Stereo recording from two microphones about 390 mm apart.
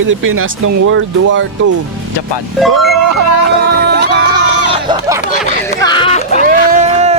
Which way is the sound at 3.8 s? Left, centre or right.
Right.